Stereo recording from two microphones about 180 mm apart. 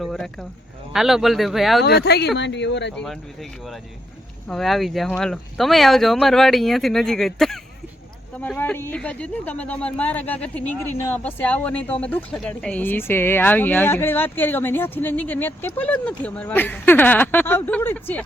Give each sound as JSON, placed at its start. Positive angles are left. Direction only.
{"t": 0.0, "sound": "speech", "side_deg": 0}
{"t": 1.8, "sound": "speech", "side_deg": 65}
{"t": 2.9, "sound": "speech", "side_deg": 5}
{"t": 4.4, "sound": "speech", "side_deg": 0}